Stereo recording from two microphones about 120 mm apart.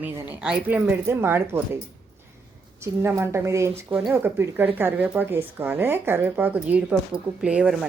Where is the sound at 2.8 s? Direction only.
20° right (ahead or behind).